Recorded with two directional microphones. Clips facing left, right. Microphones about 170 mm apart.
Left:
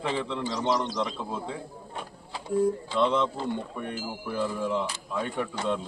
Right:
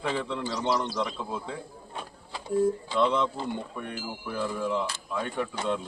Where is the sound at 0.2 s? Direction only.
Centre (ahead or behind).